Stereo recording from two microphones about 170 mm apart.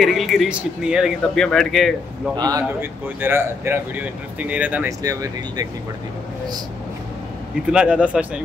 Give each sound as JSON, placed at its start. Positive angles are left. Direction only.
{"t": 0.0, "sound": "speech", "side_deg": 0}
{"t": 2.3, "sound": "speech", "side_deg": -20}
{"t": 5.0, "sound": "speech", "side_deg": -20}
{"t": 7.7, "sound": "speech", "side_deg": -5}